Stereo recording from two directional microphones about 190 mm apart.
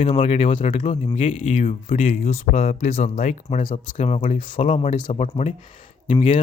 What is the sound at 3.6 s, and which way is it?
Speech, 25° left (ahead or behind).